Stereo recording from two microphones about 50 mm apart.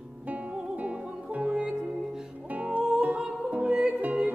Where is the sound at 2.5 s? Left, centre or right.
Right.